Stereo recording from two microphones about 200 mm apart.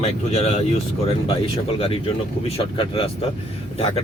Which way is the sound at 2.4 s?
30° left (ahead or behind).